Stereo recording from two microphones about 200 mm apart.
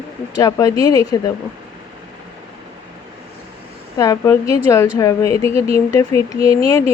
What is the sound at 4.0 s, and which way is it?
A woman's voice, 15° left (ahead or behind).